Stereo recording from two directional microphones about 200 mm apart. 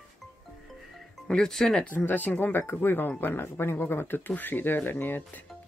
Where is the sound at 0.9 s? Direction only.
5° left (ahead or behind).